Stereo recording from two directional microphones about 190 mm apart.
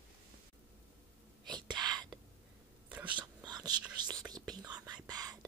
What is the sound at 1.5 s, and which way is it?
Whispering, 25° right (ahead or behind).